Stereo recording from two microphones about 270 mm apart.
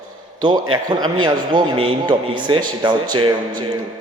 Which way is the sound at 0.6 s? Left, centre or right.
Right.